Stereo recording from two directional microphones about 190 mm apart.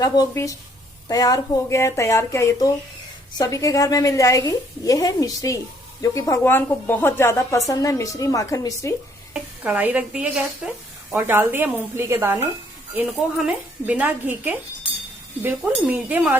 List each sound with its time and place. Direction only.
0.0 s a woman's voice: 20° left (ahead or behind)
9.3 s a woman's voice: 5° right (ahead or behind)